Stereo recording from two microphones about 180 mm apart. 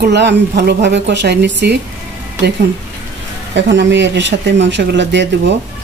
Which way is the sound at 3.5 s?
80° right.